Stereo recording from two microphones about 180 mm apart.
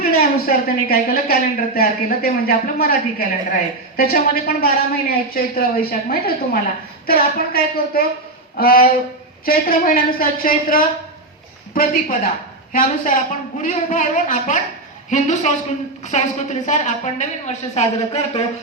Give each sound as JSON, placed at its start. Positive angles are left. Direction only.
{"t": 0.0, "sound": "a woman's voice", "side_deg": 55}